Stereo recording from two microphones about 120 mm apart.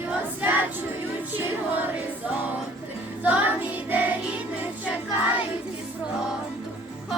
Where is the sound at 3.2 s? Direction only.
10° right (ahead or behind).